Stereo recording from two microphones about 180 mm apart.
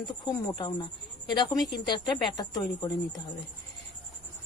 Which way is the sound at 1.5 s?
Centre (ahead or behind).